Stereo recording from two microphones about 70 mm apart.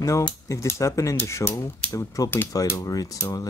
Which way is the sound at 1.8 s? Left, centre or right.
Left.